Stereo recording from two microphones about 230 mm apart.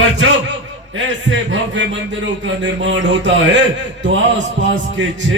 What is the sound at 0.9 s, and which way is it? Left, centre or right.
Speech, right.